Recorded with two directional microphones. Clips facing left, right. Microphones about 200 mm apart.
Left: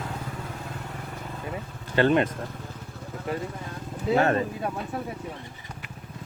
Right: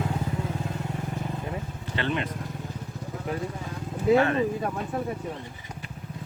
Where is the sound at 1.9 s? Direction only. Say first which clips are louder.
Left 8 dB; 45° left (ahead or behind).